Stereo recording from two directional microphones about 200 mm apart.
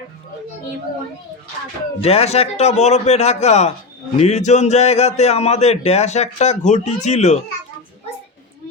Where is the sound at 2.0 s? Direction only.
30° left (ahead or behind).